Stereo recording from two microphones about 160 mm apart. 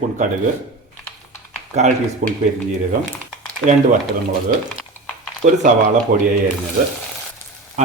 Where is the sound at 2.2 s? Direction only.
55° right (ahead or behind).